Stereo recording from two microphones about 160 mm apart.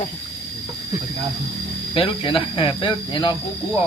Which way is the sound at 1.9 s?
30° left (ahead or behind).